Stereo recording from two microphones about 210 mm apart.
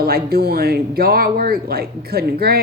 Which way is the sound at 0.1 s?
45° right (ahead or behind).